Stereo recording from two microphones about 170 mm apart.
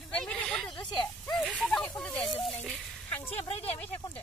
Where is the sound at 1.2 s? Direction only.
5° left (ahead or behind).